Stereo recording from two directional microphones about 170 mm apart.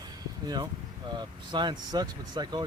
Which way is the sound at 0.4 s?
25° right (ahead or behind).